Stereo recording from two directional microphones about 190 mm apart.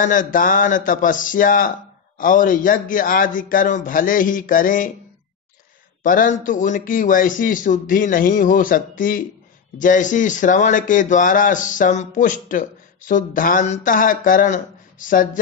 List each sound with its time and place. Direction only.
0.0 s a man's voice: 45° left (ahead or behind)
6.0 s a man's voice: 45° left (ahead or behind)